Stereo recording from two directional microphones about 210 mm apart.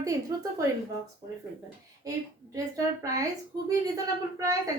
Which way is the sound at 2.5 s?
15° right (ahead or behind).